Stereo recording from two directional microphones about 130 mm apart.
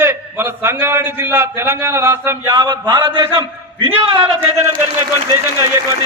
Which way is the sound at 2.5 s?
30° right (ahead or behind).